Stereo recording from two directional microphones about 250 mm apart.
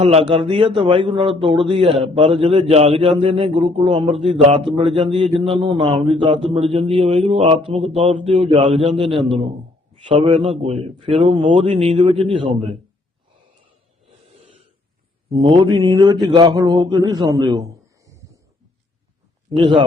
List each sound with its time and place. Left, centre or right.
0.0 s a man's voice: right
15.4 s a man's voice: centre
19.5 s a man's voice: centre